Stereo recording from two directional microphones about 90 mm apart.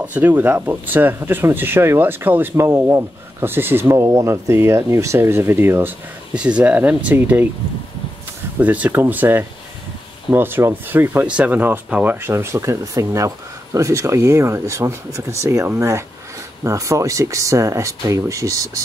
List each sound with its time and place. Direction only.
0.0 s speech: 20° right (ahead or behind)
6.3 s speech: 10° right (ahead or behind)
8.5 s speech: 15° right (ahead or behind); by 18.7 s 35° right (ahead or behind)